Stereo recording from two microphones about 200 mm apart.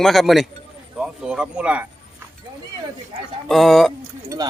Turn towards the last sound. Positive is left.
turn(degrees=-15)  # may be behind; listen again after turning